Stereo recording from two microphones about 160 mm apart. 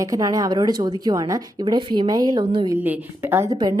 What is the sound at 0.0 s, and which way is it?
A woman's voice, 20° right (ahead or behind).